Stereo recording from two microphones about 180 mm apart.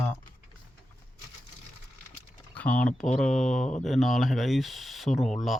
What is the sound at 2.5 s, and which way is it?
Speech, 10° left (ahead or behind).